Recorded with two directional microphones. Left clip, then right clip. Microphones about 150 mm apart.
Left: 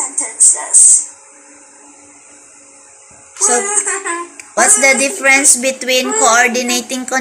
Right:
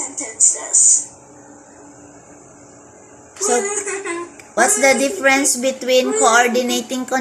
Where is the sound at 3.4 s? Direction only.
20° right (ahead or behind).